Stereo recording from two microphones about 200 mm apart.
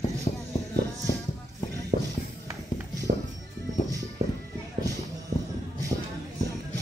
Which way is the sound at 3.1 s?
40° right (ahead or behind).